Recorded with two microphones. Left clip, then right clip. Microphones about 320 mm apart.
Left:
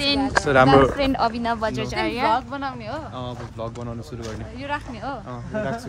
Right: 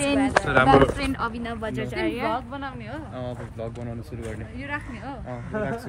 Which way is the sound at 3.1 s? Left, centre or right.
Centre.